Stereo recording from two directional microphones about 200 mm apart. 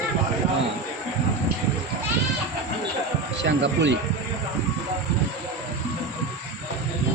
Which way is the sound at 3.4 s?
60° right (ahead or behind).